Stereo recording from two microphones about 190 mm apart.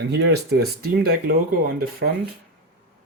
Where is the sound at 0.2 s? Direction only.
60° right (ahead or behind).